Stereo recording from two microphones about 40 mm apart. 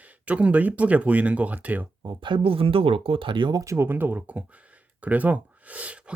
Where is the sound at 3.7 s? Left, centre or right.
Right.